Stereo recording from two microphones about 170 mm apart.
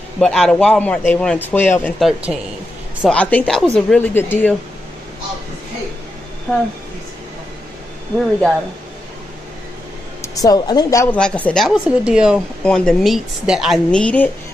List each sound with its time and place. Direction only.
0.2 s speech: 5° left (ahead or behind)
2.0 s speech: centre (ahead or behind)
6.5 s speech: 10° left (ahead or behind)
10.2 s a woman's voice: 20° left (ahead or behind)
11.1 s speech: 5° left (ahead or behind)